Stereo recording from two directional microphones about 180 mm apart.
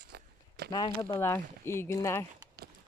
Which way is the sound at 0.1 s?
65° right (ahead or behind).